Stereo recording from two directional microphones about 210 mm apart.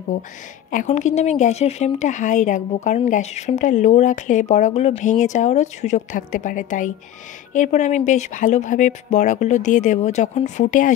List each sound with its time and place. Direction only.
0.7 s speech: 35° left (ahead or behind)